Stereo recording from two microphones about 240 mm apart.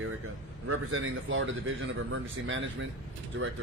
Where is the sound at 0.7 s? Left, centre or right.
Right.